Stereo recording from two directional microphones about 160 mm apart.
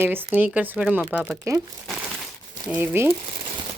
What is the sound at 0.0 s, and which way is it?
Speech, 15° right (ahead or behind).